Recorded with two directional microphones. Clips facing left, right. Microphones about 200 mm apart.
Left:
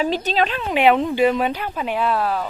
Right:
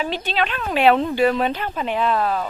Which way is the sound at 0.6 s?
15° left (ahead or behind).